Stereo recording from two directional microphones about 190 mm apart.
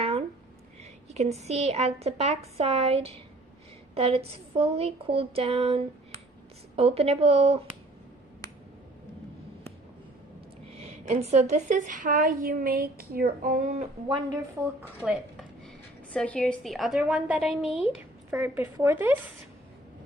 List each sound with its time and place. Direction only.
0.8 s a woman's voice: 35° right (ahead or behind)
10.7 s a woman's voice: 35° right (ahead or behind)
14.8 s dishes: 5° right (ahead or behind)
16.1 s a woman's voice: 5° left (ahead or behind); by 19.1 s 10° right (ahead or behind)